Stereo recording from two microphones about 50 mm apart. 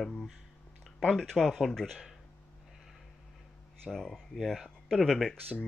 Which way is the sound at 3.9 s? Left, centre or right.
Centre.